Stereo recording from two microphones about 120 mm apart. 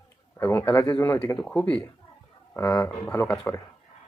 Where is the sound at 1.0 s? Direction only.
25° left (ahead or behind).